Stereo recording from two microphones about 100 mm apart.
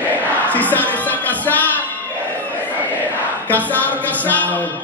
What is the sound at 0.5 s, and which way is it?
Music, 15° left (ahead or behind).